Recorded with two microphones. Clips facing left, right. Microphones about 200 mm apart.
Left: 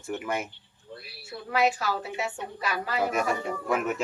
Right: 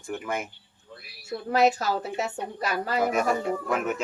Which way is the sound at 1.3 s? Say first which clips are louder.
Right 4 dB; 40° right (ahead or behind).